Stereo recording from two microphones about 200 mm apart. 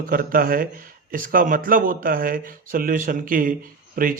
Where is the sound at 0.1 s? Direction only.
45° right (ahead or behind).